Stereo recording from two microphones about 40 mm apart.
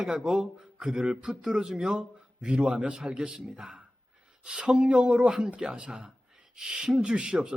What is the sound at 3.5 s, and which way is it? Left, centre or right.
Speech, centre.